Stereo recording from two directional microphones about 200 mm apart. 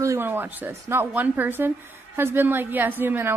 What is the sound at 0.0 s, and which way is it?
A woman's voice, 15° right (ahead or behind).